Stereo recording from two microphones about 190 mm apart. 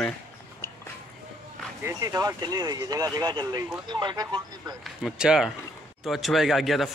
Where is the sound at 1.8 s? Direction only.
15° right (ahead or behind).